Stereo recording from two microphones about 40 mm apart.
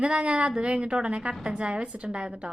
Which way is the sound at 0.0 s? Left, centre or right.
Right.